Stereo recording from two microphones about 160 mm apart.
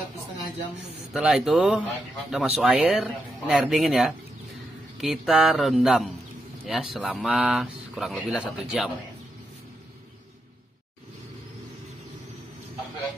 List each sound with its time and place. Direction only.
1.1 s speech: centre (ahead or behind)